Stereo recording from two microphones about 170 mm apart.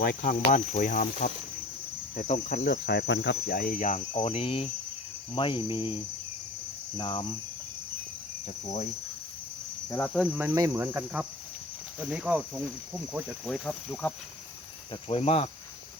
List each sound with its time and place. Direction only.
0.0 s speech: 65° left (ahead or behind)
2.1 s cricket: 50° left (ahead or behind)
2.6 s cricket: 75° left (ahead or behind); by 7.3 s 30° left (ahead or behind)
10.3 s speech: 10° right (ahead or behind); by 14.1 s 10° left (ahead or behind)
15.0 s cricket: 35° left (ahead or behind)